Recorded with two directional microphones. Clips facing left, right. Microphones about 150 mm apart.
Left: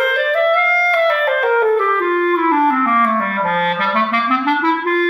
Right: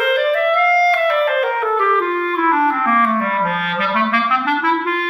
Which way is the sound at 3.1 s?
40° left (ahead or behind).